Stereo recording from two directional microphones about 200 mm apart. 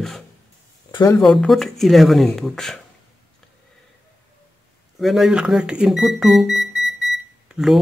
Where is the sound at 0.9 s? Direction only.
15° left (ahead or behind).